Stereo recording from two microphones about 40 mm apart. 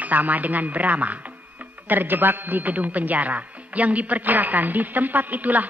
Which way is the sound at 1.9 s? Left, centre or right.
Right.